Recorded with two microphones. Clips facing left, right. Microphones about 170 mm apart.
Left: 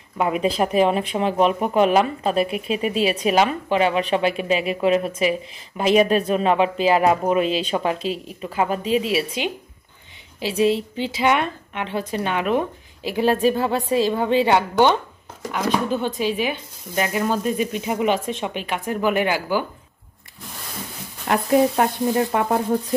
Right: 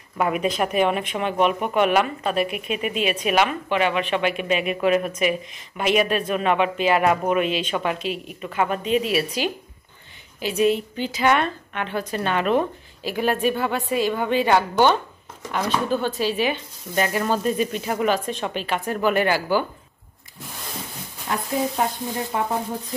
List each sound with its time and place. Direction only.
0.2 s a woman's voice: 25° left (ahead or behind)
12.2 s speech: 10° left (ahead or behind)
13.0 s a woman's voice: 25° left (ahead or behind)
16.2 s speech: 15° left (ahead or behind)
18.4 s speech: 10° left (ahead or behind)
21.3 s sizzle: 65° left (ahead or behind)